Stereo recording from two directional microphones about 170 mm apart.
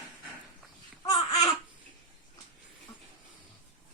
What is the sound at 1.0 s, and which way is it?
Babbling, 25° left (ahead or behind).